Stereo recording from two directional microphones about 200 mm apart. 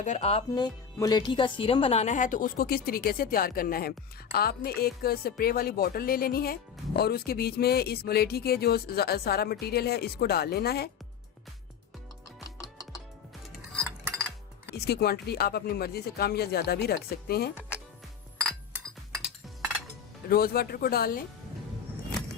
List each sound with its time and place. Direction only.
0.0 s speech: 35° left (ahead or behind); by 10.8 s 50° left (ahead or behind)
13.5 s music: centre (ahead or behind)
14.8 s speech: 50° left (ahead or behind)
18.7 s chink: 10° right (ahead or behind)
20.2 s speech: 50° left (ahead or behind)